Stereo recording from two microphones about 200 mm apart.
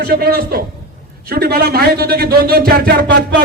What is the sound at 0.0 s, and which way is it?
Speech, 50° right (ahead or behind).